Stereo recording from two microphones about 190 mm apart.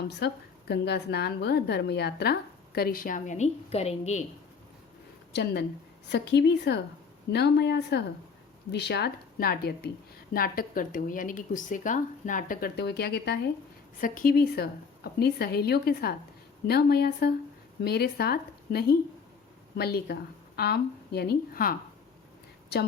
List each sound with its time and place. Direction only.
0.2 s a woman's voice: 60° left (ahead or behind); by 4.2 s 35° left (ahead or behind)
5.3 s a woman's voice: 60° left (ahead or behind)
14.0 s a woman's voice: 45° left (ahead or behind)